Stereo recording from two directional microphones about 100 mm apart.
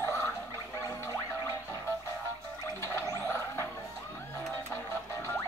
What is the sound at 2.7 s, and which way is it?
Gargling, 25° left (ahead or behind).